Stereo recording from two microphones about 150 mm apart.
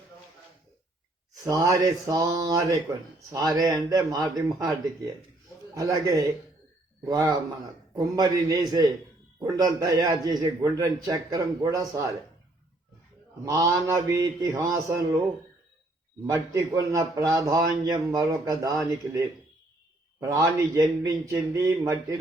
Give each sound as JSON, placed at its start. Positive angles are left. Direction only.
{"t": 1.5, "sound": "a man's voice", "side_deg": -25}
{"t": 5.7, "sound": "a man's voice", "side_deg": -20}
{"t": 13.4, "sound": "a man's voice", "side_deg": -20}
{"t": 16.2, "sound": "a man's voice", "side_deg": -20}